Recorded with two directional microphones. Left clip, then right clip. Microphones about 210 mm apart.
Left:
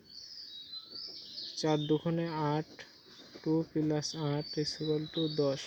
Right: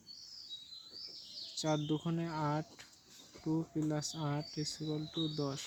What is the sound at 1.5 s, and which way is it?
Speech, centre (ahead or behind).